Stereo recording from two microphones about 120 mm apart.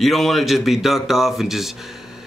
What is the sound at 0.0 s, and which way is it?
Speech, centre (ahead or behind).